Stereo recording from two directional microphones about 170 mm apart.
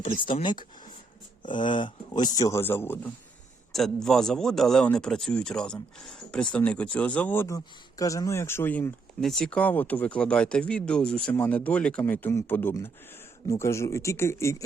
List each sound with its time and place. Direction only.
0.2 s speech: 30° left (ahead or behind); by 3.1 s 15° left (ahead or behind)
3.7 s speech: centre (ahead or behind)